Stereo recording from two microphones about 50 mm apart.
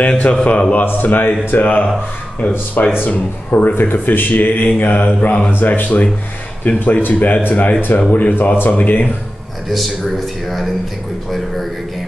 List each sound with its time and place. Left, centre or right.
0.0 s speech: left
0.8 s speech: left
9.7 s speech: centre